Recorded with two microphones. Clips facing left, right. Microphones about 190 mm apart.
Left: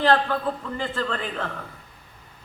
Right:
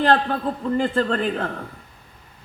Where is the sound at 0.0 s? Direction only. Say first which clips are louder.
Right 2 dB; 55° right (ahead or behind).